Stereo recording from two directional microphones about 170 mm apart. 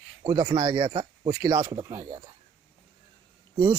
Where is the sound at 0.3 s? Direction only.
25° right (ahead or behind).